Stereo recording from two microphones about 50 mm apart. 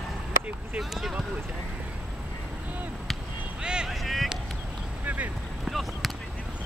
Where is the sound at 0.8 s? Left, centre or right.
Centre.